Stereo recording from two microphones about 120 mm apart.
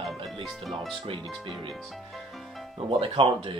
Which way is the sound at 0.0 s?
Centre (ahead or behind).